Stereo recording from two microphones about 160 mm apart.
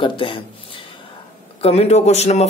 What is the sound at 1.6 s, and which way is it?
Speech, 40° left (ahead or behind).